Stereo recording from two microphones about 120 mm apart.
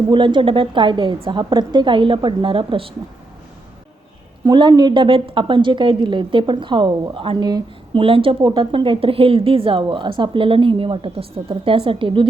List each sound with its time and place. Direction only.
0.1 s a woman's voice: 40° right (ahead or behind)
4.4 s a woman's voice: 35° right (ahead or behind)
8.0 s a woman's voice: 50° right (ahead or behind)